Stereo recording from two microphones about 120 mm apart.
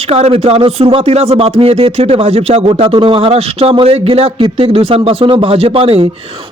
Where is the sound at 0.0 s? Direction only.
60° right (ahead or behind).